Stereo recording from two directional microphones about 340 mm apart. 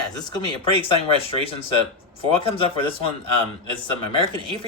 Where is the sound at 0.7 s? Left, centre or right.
Centre.